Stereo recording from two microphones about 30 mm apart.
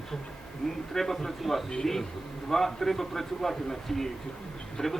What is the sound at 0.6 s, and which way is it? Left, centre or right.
Speech, centre.